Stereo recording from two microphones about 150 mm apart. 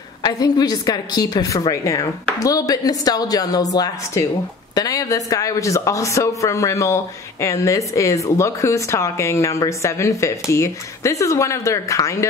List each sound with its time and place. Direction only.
0.2 s speech: 25° left (ahead or behind)